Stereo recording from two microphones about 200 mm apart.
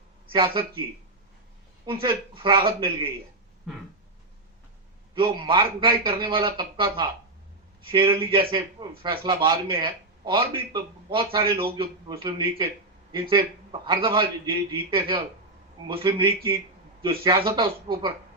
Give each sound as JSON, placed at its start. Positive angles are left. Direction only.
{"t": 0.3, "sound": "a man's voice", "side_deg": -25}
{"t": 1.9, "sound": "a man's voice", "side_deg": -25}
{"t": 5.1, "sound": "a man's voice", "side_deg": -25}